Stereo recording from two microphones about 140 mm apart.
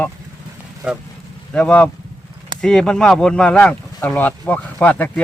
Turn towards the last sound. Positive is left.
turn(degrees=10)  # may be behind; listen again after turning